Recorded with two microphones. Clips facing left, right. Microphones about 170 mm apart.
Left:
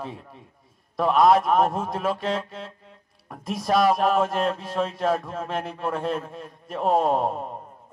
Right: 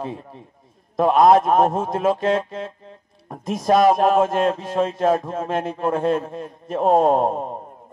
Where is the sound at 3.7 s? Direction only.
45° right (ahead or behind).